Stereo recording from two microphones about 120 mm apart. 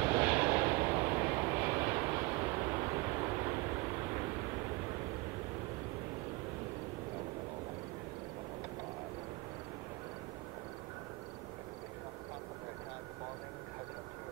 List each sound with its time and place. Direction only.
0.0 s vehicle: 15° right (ahead or behind)